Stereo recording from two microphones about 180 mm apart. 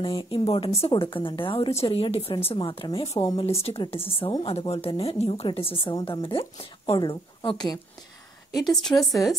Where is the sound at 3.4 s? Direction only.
35° left (ahead or behind).